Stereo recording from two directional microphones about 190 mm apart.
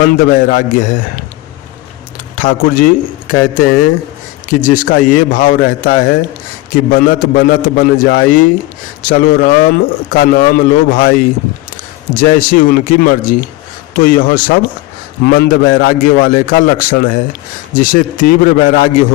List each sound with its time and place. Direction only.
0.0 s speech: 45° left (ahead or behind)
2.3 s speech: 45° left (ahead or behind)
12.3 s speech: 45° left (ahead or behind)